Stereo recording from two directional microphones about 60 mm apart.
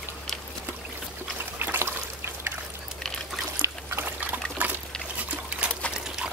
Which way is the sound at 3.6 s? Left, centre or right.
Right.